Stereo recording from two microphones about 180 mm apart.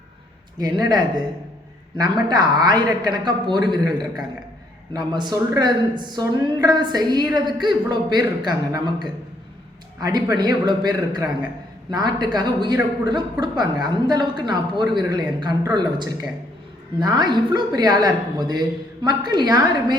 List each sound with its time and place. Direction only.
0.6 s a woman's voice: 20° right (ahead or behind)